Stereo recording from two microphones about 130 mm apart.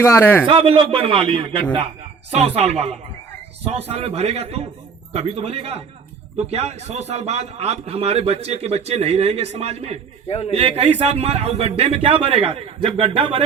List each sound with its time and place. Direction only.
0.0 s a man's voice: 20° left (ahead or behind)
0.4 s a man's voice: 45° right (ahead or behind)
10.2 s a man's voice: 55° left (ahead or behind)
10.5 s a man's voice: 50° right (ahead or behind)